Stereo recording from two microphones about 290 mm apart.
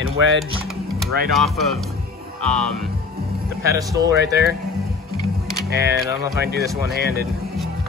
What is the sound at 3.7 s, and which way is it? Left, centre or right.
Speech, centre.